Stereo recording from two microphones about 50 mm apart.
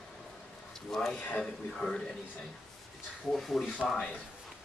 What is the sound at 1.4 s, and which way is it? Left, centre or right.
Speech, centre.